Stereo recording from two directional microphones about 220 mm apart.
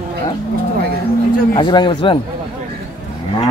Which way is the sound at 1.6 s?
20° left (ahead or behind).